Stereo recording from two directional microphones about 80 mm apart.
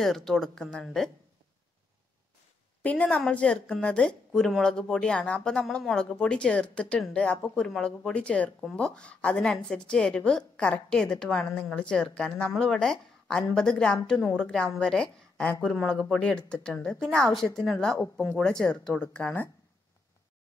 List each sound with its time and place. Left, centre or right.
0.0 s speech: centre
2.8 s a woman's voice: centre
15.8 s speech: centre
16.2 s a woman's voice: centre